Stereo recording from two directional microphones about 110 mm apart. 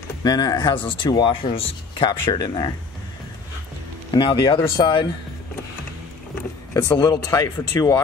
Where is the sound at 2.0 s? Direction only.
40° left (ahead or behind).